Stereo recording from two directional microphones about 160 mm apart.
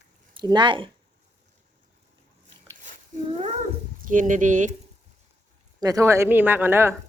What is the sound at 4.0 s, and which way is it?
Speech, 55° right (ahead or behind).